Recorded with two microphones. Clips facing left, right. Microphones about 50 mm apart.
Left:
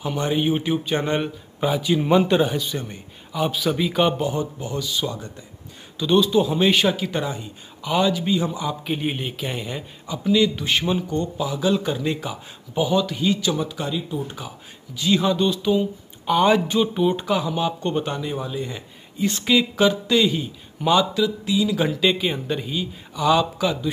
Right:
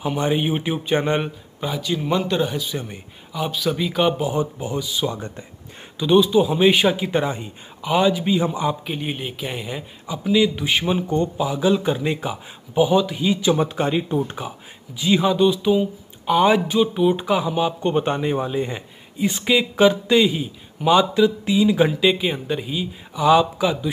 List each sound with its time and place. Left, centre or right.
0.0 s speech: centre
1.6 s a man's voice: centre
2.4 s a man's voice: centre
4.3 s speech: centre
5.9 s speech: centre
8.8 s speech: centre
13.6 s speech: right
15.0 s speech: centre
18.0 s speech: right
19.1 s speech: centre; by 21.7 s right
21.7 s speech: centre